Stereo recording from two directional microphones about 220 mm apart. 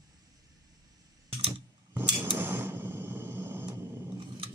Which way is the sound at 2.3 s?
10° right (ahead or behind).